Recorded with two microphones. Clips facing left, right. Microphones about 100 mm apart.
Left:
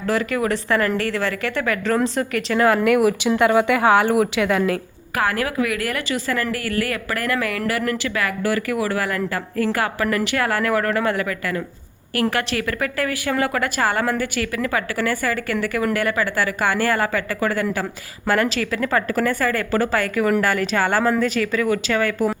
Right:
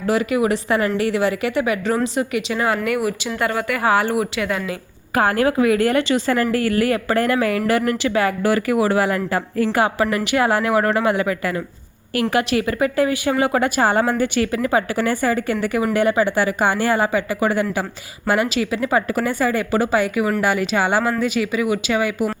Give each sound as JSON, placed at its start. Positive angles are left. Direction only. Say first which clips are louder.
{"t": 0.1, "sound": "speech", "louder": "right 3 dB", "side_deg": -15}
{"t": 3.0, "sound": "speech", "louder": "left 5 dB", "side_deg": 5}
{"t": 3.5, "sound": "speech", "louder": "left 6 dB", "side_deg": 15}
{"t": 3.8, "sound": "speech", "louder": "left 2 dB", "side_deg": 0}
{"t": 5.1, "sound": "a woman's voice", "louder": "right 4 dB", "side_deg": -30}